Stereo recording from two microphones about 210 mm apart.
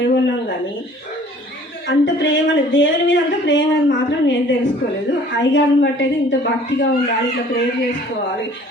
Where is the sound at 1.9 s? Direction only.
60° left (ahead or behind).